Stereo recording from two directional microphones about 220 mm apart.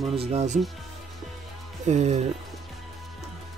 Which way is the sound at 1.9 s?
30° right (ahead or behind).